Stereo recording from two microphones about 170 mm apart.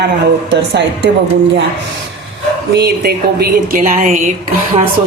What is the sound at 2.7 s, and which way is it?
Speech, 70° right (ahead or behind).